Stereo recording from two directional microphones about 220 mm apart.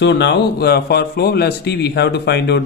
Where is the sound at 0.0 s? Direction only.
50° left (ahead or behind).